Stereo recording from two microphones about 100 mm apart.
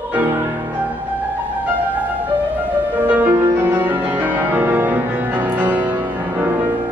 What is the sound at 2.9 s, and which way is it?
Music, 15° right (ahead or behind).